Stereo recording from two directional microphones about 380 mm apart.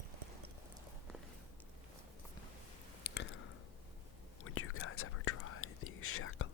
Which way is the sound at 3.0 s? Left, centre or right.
Left.